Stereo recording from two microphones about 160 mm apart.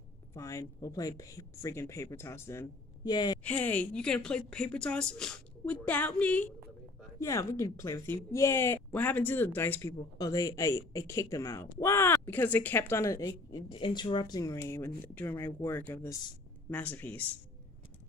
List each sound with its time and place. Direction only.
0.3 s speech: 20° left (ahead or behind)
3.4 s speech: 10° left (ahead or behind)